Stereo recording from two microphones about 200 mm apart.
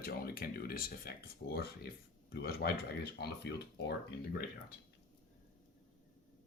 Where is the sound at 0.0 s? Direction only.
50° left (ahead or behind).